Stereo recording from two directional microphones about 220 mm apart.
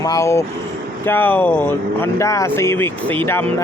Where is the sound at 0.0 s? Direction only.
15° left (ahead or behind).